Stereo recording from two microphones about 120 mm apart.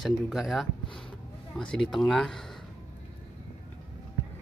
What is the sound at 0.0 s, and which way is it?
Speech, centre (ahead or behind).